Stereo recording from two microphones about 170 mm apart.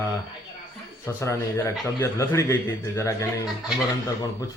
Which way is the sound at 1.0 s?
15° left (ahead or behind).